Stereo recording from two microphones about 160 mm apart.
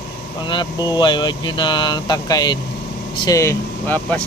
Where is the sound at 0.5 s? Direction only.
30° left (ahead or behind).